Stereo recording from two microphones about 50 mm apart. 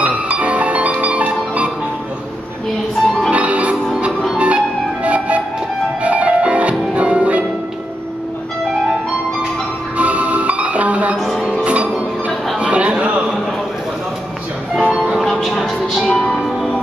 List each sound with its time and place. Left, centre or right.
0.0 s music: right
3.3 s music: right
9.9 s music: right
11.1 s music: centre
11.6 s music: right
12.5 s a sound: right
14.9 s music: right
15.1 s music: centre
16.1 s music: centre
16.3 s music: centre